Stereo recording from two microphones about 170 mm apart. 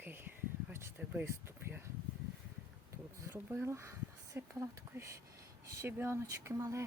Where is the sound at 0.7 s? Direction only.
15° right (ahead or behind).